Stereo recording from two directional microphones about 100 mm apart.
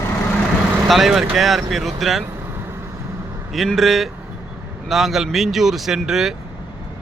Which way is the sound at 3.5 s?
Centre (ahead or behind).